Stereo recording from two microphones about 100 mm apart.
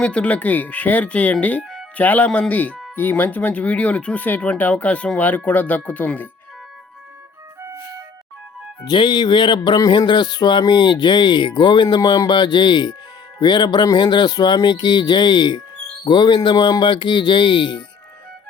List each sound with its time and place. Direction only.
0.0 s speech: 10° left (ahead or behind)
1.6 s music: centre (ahead or behind)
2.0 s speech: 15° left (ahead or behind)
8.8 s music: 50° left (ahead or behind)